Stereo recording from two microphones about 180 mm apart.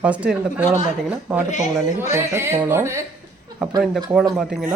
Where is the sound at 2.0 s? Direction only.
15° right (ahead or behind).